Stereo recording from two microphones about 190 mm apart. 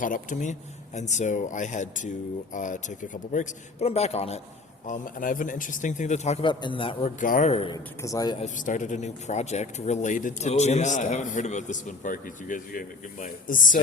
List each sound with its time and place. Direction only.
0.0 s speech: 45° left (ahead or behind)
4.9 s speech: 45° left (ahead or behind)
6.5 s a man's voice: 25° left (ahead or behind)
7.2 s speech: 45° left (ahead or behind)
8.0 s a man's voice: 20° left (ahead or behind)
8.4 s speech: 40° left (ahead or behind)